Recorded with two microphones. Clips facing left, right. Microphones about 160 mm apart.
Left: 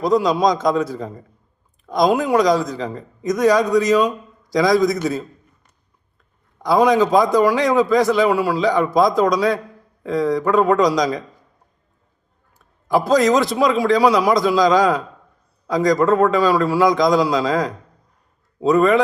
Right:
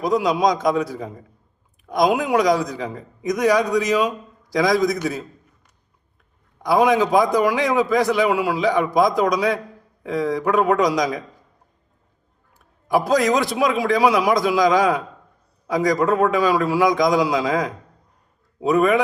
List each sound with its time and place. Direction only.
0.0 s a man's voice: 15° right (ahead or behind)
6.7 s a man's voice: 20° right (ahead or behind)
12.9 s a man's voice: 15° right (ahead or behind)